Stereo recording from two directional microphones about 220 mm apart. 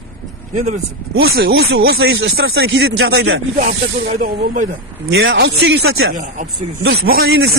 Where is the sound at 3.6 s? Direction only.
45° right (ahead or behind).